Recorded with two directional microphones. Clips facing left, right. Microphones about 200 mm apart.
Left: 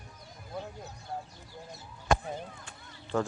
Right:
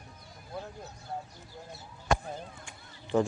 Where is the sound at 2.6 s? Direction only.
15° right (ahead or behind).